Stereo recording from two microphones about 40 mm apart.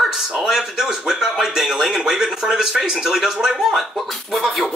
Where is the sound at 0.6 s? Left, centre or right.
Centre.